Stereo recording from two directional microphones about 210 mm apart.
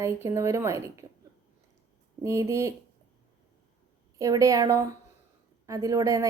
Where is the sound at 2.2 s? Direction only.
15° right (ahead or behind).